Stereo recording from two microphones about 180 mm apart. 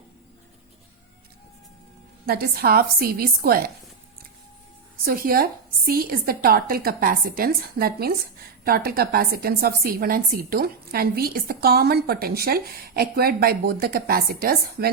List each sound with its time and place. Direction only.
2.2 s a woman's voice: 55° right (ahead or behind)
5.0 s a woman's voice: 55° right (ahead or behind)